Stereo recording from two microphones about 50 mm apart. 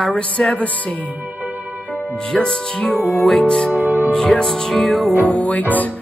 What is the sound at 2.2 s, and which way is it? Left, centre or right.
Music, centre.